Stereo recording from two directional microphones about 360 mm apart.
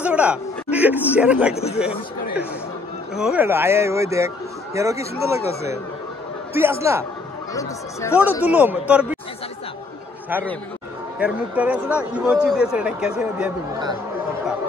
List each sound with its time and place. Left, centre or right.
0.0 s a man's voice: centre
1.5 s speech: centre
3.2 s speech: centre
6.5 s speech: centre
7.5 s speech: centre
8.2 s speech: centre
10.3 s speech: centre